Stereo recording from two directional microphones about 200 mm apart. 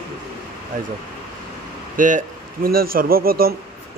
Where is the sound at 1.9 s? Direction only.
40° right (ahead or behind).